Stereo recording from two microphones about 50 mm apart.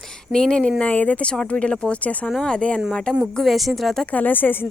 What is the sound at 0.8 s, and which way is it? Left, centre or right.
Speech, left.